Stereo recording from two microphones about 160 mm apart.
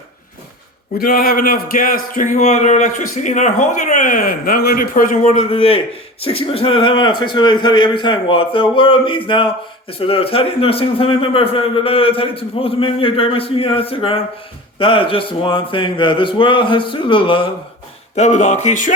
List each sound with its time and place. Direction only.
0.9 s speech: 65° left (ahead or behind); by 5.5 s 50° left (ahead or behind)
5.5 s a man's voice: 35° left (ahead or behind)
18.1 s speech: 45° left (ahead or behind)